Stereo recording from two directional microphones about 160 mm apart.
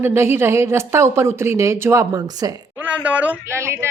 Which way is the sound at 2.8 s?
10° right (ahead or behind).